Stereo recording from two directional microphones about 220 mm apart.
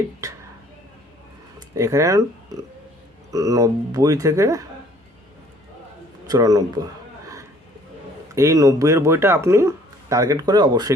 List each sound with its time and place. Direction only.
1.5 s speech: 15° right (ahead or behind)
6.2 s speech: 15° right (ahead or behind)
8.4 s speech: 15° right (ahead or behind)